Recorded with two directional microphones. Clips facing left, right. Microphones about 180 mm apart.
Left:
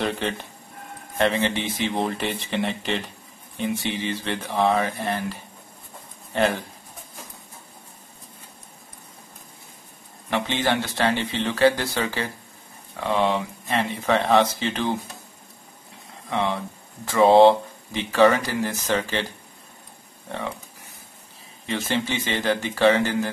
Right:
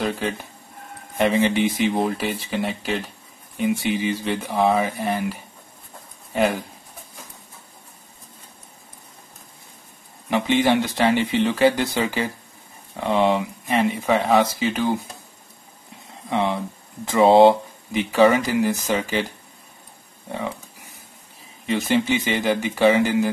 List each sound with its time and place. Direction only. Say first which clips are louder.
0.0 s speech: right 1 dB; 5° right (ahead or behind)
10.3 s speech: right 5 dB; 10° right (ahead or behind)
16.3 s speech: right 3 dB; 15° right (ahead or behind)
21.6 s speech: right 5 dB; 15° right (ahead or behind)